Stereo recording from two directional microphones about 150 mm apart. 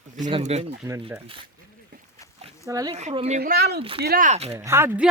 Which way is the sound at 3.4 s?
90° right.